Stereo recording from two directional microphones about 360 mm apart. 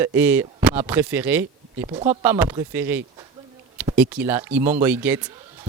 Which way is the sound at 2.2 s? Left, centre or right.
Centre.